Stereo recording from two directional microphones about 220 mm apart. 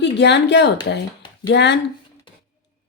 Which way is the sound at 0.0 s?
50° left (ahead or behind).